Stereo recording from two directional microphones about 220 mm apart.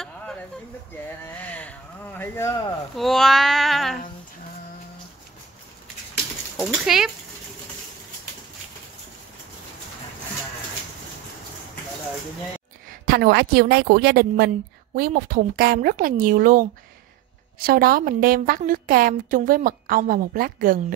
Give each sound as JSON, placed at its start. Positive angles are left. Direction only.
{"t": 1.4, "sound": "a sound", "side_deg": 5}
{"t": 3.0, "sound": "child singing", "side_deg": 0}
{"t": 6.5, "sound": "speech", "side_deg": -5}
{"t": 13.0, "sound": "a woman's voice", "side_deg": -45}